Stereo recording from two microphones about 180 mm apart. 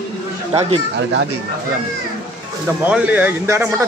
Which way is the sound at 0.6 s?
35° right (ahead or behind).